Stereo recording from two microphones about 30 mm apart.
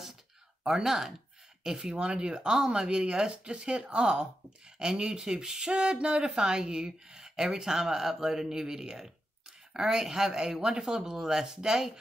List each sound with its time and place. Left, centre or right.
0.7 s speech: centre
2.0 s speech: right
5.7 s speech: right